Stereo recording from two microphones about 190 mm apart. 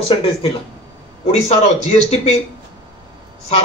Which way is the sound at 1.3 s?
35° left (ahead or behind).